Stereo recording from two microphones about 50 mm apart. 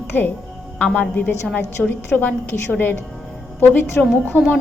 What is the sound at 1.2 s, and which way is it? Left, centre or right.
A woman's voice, left.